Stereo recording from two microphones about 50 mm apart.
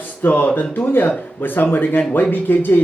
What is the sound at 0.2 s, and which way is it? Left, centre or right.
A man's voice, left.